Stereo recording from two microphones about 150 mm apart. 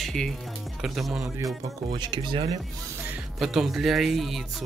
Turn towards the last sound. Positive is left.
turn(degrees=0)  # may be behind; listen again after turning